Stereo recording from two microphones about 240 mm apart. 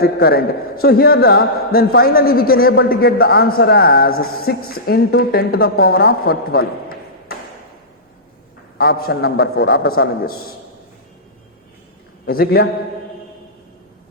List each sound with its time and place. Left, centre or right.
0.0 s a man's voice: left
8.8 s a man's voice: left
12.2 s a man's voice: left